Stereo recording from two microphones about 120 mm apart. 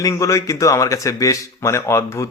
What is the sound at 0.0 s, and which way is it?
A man's voice, 25° left (ahead or behind).